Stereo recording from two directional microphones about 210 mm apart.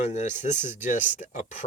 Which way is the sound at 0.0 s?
35° left (ahead or behind).